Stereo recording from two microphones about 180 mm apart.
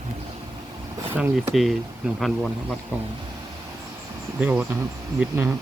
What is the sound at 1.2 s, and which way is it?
Speech, 5° right (ahead or behind).